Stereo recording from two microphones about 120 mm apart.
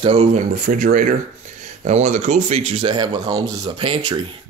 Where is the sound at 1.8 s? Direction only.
75° right (ahead or behind); by 3.7 s 30° right (ahead or behind).